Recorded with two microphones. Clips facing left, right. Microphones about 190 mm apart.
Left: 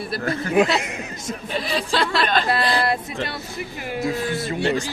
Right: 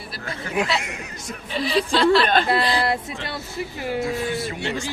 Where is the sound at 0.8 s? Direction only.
20° left (ahead or behind).